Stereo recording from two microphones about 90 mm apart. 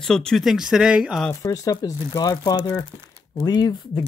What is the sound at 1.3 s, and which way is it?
Speech, 40° left (ahead or behind).